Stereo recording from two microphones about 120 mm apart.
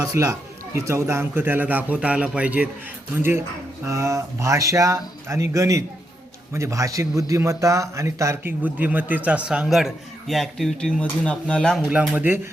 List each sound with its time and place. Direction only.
0.0 s a man's voice: 25° right (ahead or behind); by 11.8 s 5° left (ahead or behind)
11.8 s a man's voice: 10° right (ahead or behind)